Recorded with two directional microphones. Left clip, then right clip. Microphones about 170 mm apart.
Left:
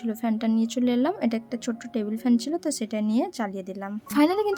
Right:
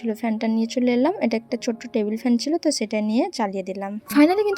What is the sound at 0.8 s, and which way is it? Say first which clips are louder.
A woman's voice: right 5 dB; 15° right (ahead or behind).